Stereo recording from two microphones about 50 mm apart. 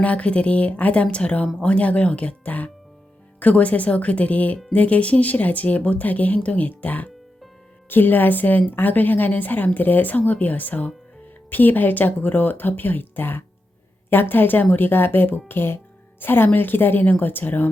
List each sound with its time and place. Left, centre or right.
0.0 s speech: left